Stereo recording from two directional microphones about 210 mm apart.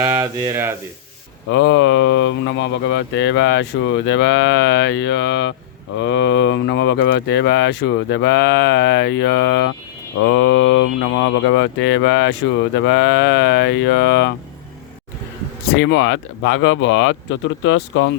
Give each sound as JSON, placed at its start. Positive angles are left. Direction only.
{"t": 0.0, "sound": "speech", "side_deg": -15}
{"t": 1.5, "sound": "speech", "side_deg": 60}
{"t": 15.8, "sound": "speech", "side_deg": 60}